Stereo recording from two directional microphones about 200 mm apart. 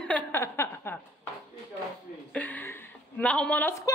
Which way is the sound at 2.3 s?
10° left (ahead or behind).